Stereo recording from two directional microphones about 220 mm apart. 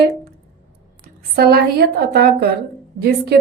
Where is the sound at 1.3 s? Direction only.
45° right (ahead or behind).